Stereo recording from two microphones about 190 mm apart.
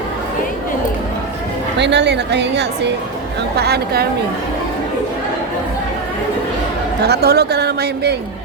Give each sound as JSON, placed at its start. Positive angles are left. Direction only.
{"t": 1.8, "sound": "a woman's voice", "side_deg": -65}
{"t": 7.0, "sound": "a woman's voice", "side_deg": -60}